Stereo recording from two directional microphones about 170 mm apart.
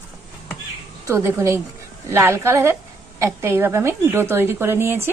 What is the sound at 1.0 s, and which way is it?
Speech, 15° right (ahead or behind).